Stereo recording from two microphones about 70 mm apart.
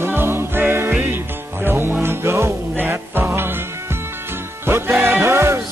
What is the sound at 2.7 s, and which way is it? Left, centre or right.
Music, right.